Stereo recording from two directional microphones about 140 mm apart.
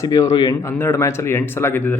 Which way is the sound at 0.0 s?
25° left (ahead or behind).